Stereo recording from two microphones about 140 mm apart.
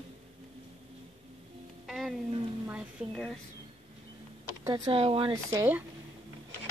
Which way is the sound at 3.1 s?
5° left (ahead or behind).